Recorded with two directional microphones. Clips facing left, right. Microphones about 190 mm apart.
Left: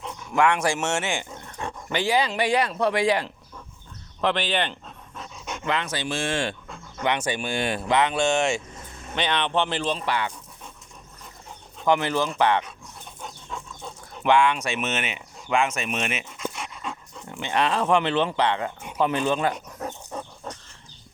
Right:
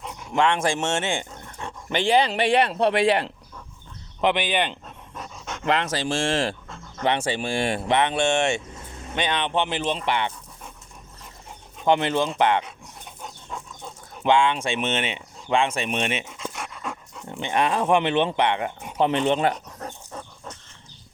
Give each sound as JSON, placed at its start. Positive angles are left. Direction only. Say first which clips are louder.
{"t": 0.3, "sound": "speech", "louder": "even", "side_deg": -25}
{"t": 4.2, "sound": "pant", "louder": "right 2 dB", "side_deg": -15}
{"t": 5.6, "sound": "speech", "louder": "right 4 dB", "side_deg": -35}
{"t": 11.9, "sound": "speech", "louder": "right 1 dB", "side_deg": -25}
{"t": 14.3, "sound": "speech", "louder": "even", "side_deg": -25}
{"t": 17.4, "sound": "speech", "louder": "right 1 dB", "side_deg": -20}